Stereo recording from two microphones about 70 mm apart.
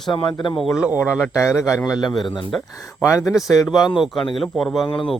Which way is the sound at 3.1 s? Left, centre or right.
Left.